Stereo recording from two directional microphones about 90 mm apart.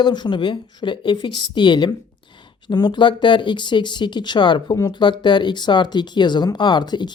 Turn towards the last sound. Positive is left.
turn(degrees=55)  # may be behind; listen again after turning